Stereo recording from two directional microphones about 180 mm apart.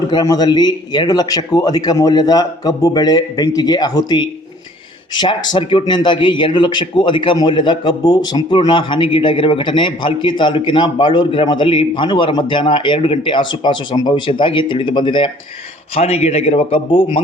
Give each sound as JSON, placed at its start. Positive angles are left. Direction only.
{"t": 0.1, "sound": "a man's voice", "side_deg": 20}